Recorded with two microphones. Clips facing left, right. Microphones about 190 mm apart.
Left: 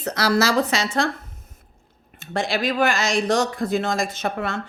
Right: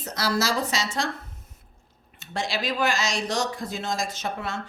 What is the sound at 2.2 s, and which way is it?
Speech, 55° left (ahead or behind).